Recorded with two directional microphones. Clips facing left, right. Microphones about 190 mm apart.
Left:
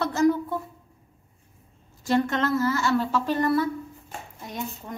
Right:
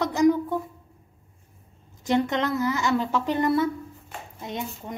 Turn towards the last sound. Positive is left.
turn(degrees=-20)  # may be behind; listen again after turning